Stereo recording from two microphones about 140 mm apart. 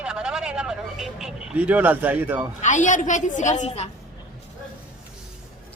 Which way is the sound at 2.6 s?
60° left (ahead or behind).